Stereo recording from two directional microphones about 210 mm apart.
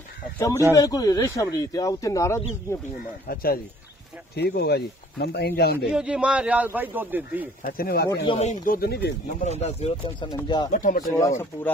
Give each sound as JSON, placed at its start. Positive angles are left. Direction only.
{"t": 0.7, "sound": "speech", "side_deg": 15}
{"t": 3.3, "sound": "speech", "side_deg": 45}
{"t": 5.9, "sound": "a man's voice", "side_deg": -5}
{"t": 7.6, "sound": "speech", "side_deg": 45}
{"t": 8.3, "sound": "speech", "side_deg": 30}
{"t": 9.4, "sound": "speech", "side_deg": 30}
{"t": 10.7, "sound": "speech", "side_deg": 40}
{"t": 11.1, "sound": "speech", "side_deg": 15}